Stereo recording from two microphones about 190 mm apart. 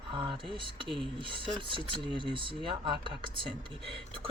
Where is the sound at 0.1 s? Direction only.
25° right (ahead or behind).